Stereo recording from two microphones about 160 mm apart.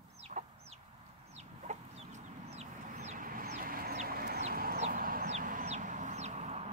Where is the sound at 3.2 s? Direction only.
60° right (ahead or behind).